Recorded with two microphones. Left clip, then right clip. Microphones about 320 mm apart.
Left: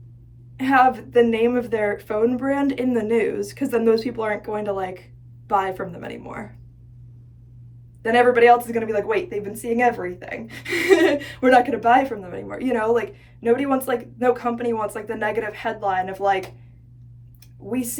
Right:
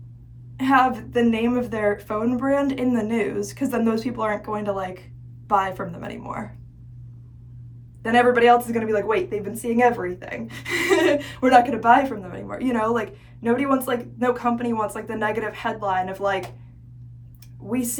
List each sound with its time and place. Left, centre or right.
0.6 s a woman's voice: centre
8.0 s speech: centre
17.7 s speech: centre